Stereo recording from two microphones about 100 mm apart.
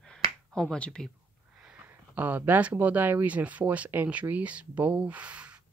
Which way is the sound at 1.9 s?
20° right (ahead or behind).